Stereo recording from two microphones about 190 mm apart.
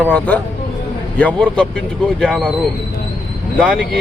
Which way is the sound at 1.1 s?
5° left (ahead or behind).